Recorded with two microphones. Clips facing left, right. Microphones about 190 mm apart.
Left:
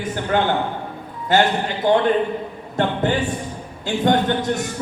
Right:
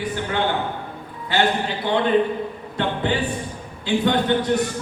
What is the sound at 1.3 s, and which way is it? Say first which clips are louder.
A man's voice: left 3 dB; 45° left (ahead or behind).